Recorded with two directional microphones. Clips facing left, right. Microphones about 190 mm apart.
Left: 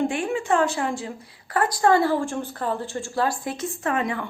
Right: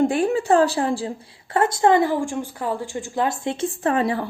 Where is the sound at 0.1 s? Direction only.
35° right (ahead or behind).